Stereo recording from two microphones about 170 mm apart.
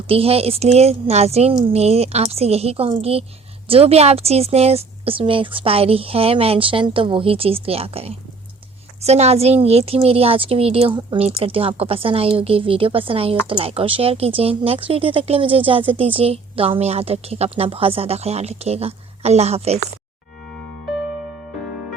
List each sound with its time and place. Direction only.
0.1 s speech: 35° right (ahead or behind)